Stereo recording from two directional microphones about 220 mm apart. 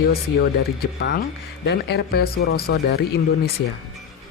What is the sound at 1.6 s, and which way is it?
Speech, 50° left (ahead or behind).